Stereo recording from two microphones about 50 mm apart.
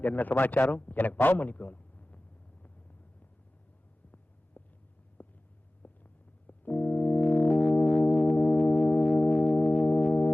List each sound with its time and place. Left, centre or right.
0.0 s a man's voice: left
4.6 s a sound: left
6.5 s organ: left
7.3 s music: left
9.8 s organ: left